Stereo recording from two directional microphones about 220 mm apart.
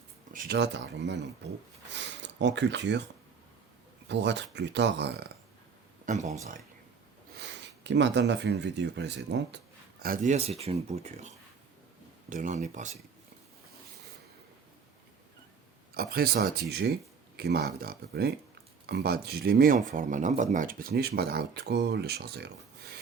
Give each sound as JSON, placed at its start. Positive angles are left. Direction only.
{"t": 0.3, "sound": "speech", "side_deg": -45}
{"t": 1.9, "sound": "a sound", "side_deg": -55}
{"t": 4.1, "sound": "speech", "side_deg": -50}
{"t": 6.1, "sound": "speech", "side_deg": -30}
{"t": 7.3, "sound": "speech", "side_deg": -50}
{"t": 10.0, "sound": "speech", "side_deg": -35}
{"t": 16.0, "sound": "speech", "side_deg": -45}